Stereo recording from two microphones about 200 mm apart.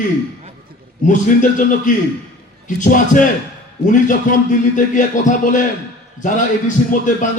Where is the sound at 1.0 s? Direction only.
40° left (ahead or behind).